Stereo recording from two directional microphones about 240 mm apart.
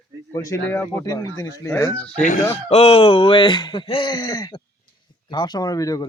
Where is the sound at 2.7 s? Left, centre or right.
Left.